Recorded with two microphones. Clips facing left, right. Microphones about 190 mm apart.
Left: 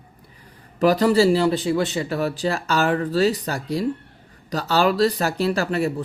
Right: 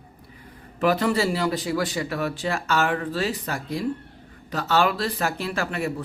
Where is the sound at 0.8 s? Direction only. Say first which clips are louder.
Left 5 dB; 35° left (ahead or behind).